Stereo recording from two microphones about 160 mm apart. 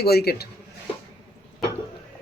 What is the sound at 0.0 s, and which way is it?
Speech, 80° left.